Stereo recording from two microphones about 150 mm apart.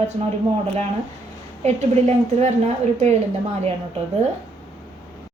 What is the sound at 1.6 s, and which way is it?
Speech, 45° right (ahead or behind).